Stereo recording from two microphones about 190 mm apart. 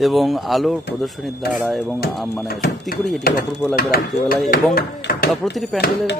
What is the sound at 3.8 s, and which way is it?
Speech, 50° left (ahead or behind).